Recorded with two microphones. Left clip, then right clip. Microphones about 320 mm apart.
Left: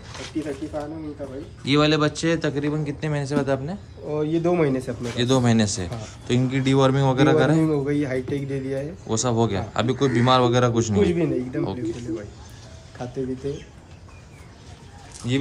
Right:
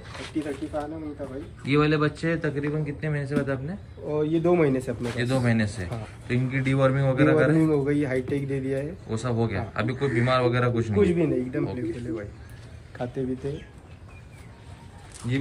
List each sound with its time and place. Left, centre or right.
0.1 s a man's voice: centre
15.2 s a man's voice: centre